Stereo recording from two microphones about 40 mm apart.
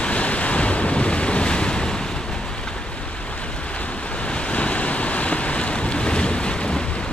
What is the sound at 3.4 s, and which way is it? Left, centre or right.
Waves, left.